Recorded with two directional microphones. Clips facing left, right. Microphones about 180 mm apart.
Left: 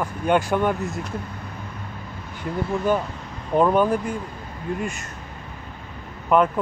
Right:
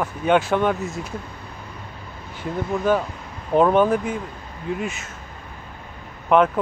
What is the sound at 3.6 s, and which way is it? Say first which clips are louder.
Speech: right 2 dB; 5° right (ahead or behind).